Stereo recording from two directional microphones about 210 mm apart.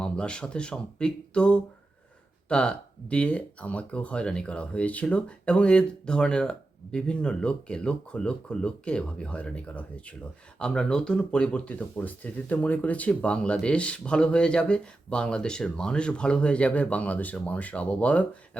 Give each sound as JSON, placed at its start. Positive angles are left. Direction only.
{"t": 0.0, "sound": "speech", "side_deg": 5}